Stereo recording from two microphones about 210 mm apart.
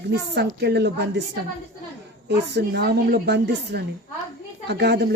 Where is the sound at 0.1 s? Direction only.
55° right (ahead or behind).